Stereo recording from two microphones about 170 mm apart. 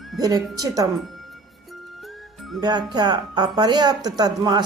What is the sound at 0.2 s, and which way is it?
Speech, 20° right (ahead or behind).